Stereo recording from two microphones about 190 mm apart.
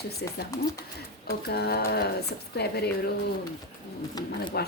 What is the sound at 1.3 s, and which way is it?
Speech, 60° left (ahead or behind).